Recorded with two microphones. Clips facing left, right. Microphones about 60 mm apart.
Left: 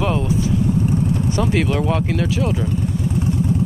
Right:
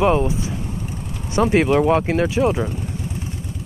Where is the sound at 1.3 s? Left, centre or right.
Right.